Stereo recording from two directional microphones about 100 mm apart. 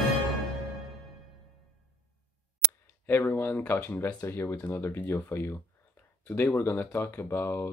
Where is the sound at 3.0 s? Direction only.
20° left (ahead or behind).